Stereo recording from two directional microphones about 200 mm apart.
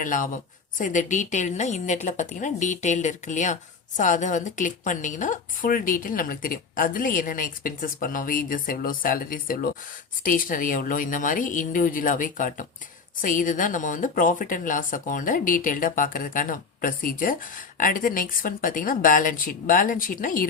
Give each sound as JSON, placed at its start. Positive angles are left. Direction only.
{"t": 0.0, "sound": "a woman's voice", "side_deg": 40}